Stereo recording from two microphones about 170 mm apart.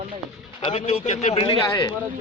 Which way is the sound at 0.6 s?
35° left (ahead or behind).